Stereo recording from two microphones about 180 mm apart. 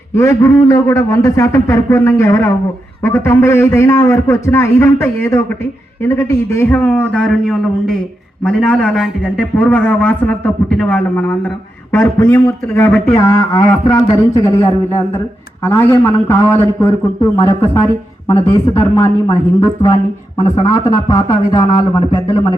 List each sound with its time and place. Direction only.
0.1 s a man's voice: 15° left (ahead or behind)